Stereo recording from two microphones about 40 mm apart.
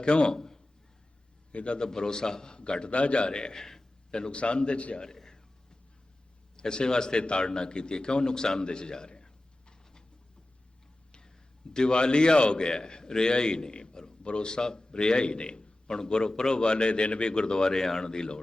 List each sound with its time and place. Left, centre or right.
0.0 s a man's voice: left
1.5 s a man's voice: left
4.1 s a man's voice: left
4.9 s a man's voice: centre
6.6 s a man's voice: left
11.7 s a man's voice: left